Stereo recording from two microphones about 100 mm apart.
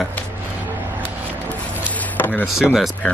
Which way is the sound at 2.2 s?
20° left (ahead or behind).